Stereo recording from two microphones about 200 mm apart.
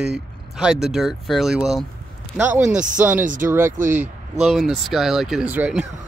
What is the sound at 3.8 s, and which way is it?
Speech, 40° right (ahead or behind).